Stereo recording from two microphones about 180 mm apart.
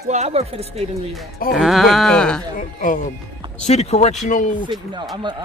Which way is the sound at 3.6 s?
35° left (ahead or behind).